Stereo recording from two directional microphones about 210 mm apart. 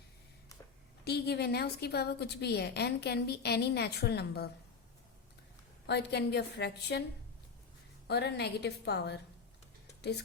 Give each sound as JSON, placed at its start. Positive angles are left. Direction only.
{"t": 1.0, "sound": "a woman's voice", "side_deg": 50}
{"t": 5.8, "sound": "a woman's voice", "side_deg": 55}
{"t": 8.0, "sound": "a woman's voice", "side_deg": 50}